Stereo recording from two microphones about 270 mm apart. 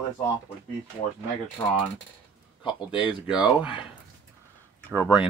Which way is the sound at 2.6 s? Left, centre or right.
Centre.